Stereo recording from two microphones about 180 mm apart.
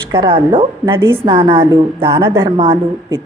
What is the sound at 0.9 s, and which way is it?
Speech, 15° right (ahead or behind).